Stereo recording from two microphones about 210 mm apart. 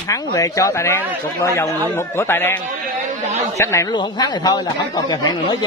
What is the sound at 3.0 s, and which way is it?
Chatter, 35° right (ahead or behind).